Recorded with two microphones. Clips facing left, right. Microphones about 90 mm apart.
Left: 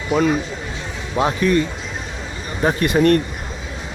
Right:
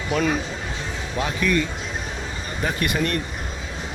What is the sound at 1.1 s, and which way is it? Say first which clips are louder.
Speech: left 6 dB; 35° left (ahead or behind).